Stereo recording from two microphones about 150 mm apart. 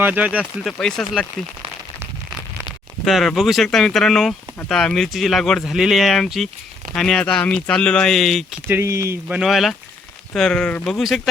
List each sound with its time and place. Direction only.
0.0 s speech: 10° right (ahead or behind)
0.7 s speech: 5° left (ahead or behind)
3.0 s speech: centre (ahead or behind)
8.6 s speech: 15° right (ahead or behind)
9.2 s speech: 5° right (ahead or behind)